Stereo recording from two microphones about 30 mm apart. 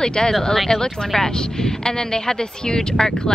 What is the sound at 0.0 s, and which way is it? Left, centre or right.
Speech, left.